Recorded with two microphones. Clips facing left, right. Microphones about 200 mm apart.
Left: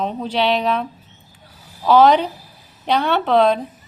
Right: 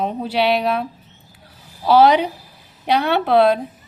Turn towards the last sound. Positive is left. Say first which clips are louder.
# right 1 dB
turn(degrees=-10)  # may be behind; listen again after turning